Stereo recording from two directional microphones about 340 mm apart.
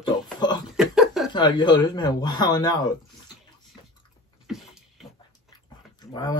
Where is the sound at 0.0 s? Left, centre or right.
Centre.